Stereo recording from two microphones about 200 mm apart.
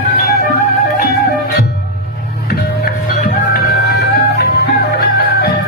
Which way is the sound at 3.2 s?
50° left (ahead or behind).